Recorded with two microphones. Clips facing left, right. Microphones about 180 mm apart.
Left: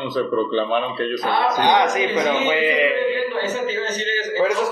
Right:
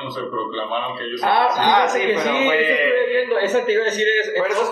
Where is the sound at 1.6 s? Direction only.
20° left (ahead or behind).